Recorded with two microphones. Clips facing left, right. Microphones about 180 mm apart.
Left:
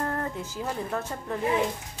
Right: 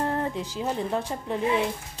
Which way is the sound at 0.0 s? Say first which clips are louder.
Right 3 dB; 20° right (ahead or behind).